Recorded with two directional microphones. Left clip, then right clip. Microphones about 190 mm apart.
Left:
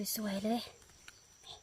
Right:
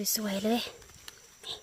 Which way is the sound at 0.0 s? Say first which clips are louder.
Right 7 dB; 20° right (ahead or behind).